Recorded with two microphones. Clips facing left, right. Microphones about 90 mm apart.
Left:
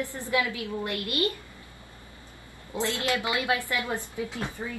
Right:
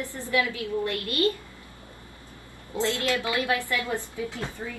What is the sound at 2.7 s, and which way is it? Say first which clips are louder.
A woman's voice: right 2 dB; 20° left (ahead or behind).